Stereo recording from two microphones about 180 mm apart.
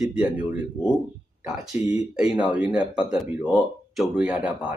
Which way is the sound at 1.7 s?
10° right (ahead or behind).